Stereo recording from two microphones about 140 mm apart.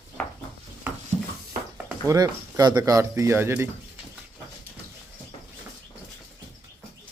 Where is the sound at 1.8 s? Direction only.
20° right (ahead or behind).